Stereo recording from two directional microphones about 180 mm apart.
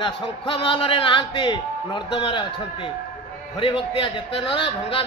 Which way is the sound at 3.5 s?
30° left (ahead or behind).